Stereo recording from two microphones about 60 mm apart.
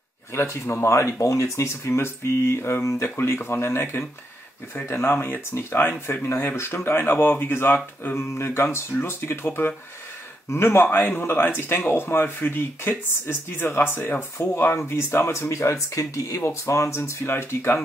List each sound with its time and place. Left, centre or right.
0.3 s speech: left